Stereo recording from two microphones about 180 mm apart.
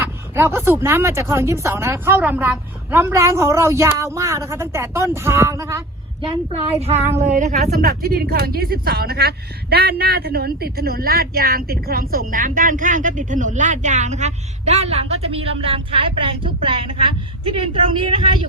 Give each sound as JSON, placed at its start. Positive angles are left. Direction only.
{"t": 0.0, "sound": "speech", "side_deg": -10}
{"t": 6.2, "sound": "a woman's voice", "side_deg": -35}
{"t": 7.7, "sound": "speech", "side_deg": -55}